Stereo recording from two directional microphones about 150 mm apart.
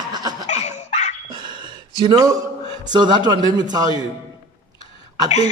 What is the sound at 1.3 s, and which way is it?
Dog, 30° right (ahead or behind).